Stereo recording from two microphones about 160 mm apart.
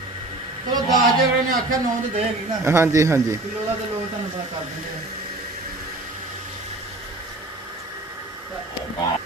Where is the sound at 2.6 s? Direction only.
15° right (ahead or behind).